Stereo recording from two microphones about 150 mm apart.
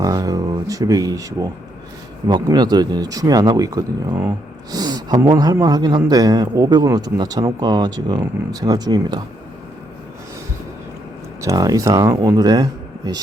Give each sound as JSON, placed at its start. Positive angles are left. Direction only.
{"t": 0.0, "sound": "a sound", "side_deg": -25}
{"t": 2.2, "sound": "speech", "side_deg": -25}
{"t": 11.3, "sound": "speech", "side_deg": -20}